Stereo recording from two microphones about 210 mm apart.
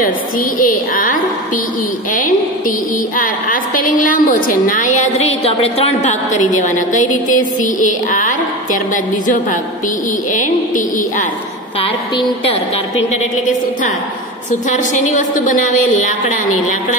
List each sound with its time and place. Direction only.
0.6 s a woman's voice: 40° left (ahead or behind)
3.2 s a woman's voice: 40° left (ahead or behind)
14.7 s a woman's voice: 35° left (ahead or behind)